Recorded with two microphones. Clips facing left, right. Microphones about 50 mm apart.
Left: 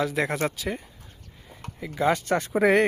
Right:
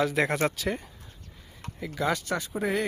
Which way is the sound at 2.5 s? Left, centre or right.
Left.